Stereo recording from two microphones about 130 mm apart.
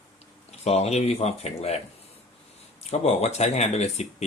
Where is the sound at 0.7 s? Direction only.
55° left (ahead or behind).